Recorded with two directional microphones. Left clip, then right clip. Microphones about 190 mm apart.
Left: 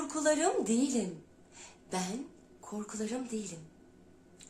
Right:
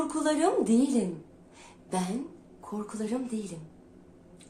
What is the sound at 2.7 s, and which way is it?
Speech, 10° left (ahead or behind).